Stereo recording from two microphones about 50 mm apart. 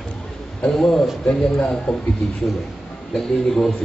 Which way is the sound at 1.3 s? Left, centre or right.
Centre.